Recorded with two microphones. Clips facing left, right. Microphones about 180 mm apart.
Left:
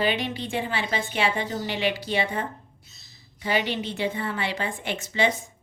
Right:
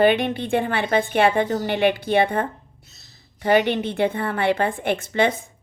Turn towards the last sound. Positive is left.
turn(degrees=-55)  # may be behind; listen again after turning